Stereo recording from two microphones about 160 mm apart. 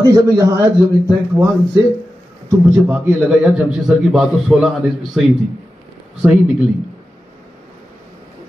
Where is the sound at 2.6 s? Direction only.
10° right (ahead or behind).